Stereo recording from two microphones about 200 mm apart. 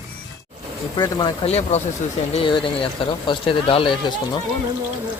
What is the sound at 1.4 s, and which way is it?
Speech, 30° left (ahead or behind).